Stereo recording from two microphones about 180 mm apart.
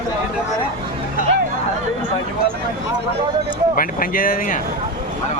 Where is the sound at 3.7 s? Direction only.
50° left (ahead or behind).